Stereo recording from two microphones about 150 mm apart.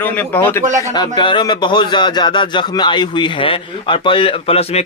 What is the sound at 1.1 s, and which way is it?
Speech, 30° left (ahead or behind).